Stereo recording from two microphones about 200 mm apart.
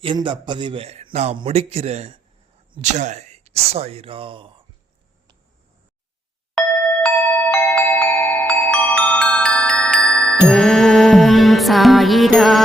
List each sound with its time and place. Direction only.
0.0 s a man's voice: 25° right (ahead or behind)
6.5 s music: centre (ahead or behind)
7.5 s glockenspiel: 5° left (ahead or behind)
8.7 s music: 5° left (ahead or behind)